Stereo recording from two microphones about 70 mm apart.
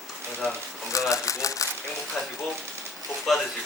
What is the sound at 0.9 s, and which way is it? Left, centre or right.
Speech, left.